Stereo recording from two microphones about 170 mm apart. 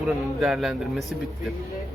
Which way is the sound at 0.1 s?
Centre (ahead or behind).